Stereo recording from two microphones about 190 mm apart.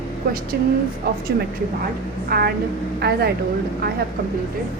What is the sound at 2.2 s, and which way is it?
A woman's voice, 55° right (ahead or behind).